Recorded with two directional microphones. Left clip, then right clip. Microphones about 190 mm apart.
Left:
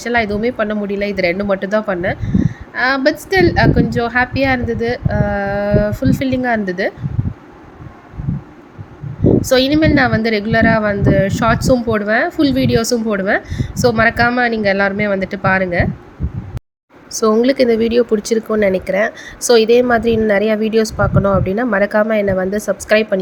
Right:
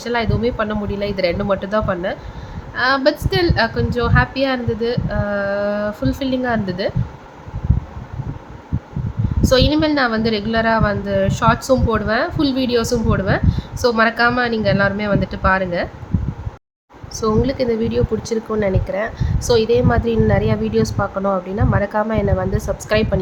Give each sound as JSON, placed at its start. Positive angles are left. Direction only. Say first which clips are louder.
{"t": 0.0, "sound": "a woman's voice", "louder": "left 3 dB", "side_deg": 15}
{"t": 9.5, "sound": "a woman's voice", "louder": "even", "side_deg": 15}
{"t": 17.2, "sound": "a woman's voice", "louder": "left 6 dB", "side_deg": 20}